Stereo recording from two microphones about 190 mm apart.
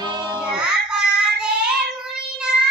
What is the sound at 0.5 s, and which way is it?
Child singing, 5° right (ahead or behind).